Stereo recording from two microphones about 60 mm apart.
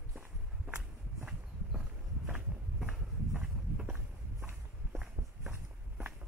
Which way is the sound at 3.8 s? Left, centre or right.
Right.